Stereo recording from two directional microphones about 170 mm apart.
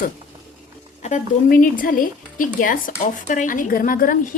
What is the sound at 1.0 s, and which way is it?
Speech, 45° left (ahead or behind).